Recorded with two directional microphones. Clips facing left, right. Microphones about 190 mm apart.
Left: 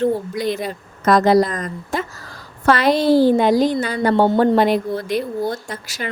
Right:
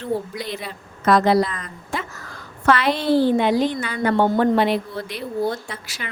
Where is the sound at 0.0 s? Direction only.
45° left (ahead or behind).